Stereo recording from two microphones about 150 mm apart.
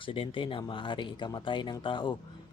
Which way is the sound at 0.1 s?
35° left (ahead or behind).